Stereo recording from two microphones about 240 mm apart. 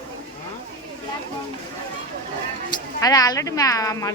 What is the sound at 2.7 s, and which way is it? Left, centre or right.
Speech, centre.